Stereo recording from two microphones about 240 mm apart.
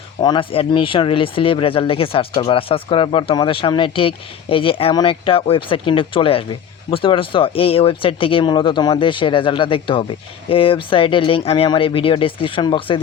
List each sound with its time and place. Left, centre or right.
0.2 s speech: centre